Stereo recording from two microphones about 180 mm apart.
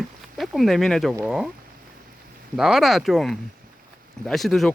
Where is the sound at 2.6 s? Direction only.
Centre (ahead or behind).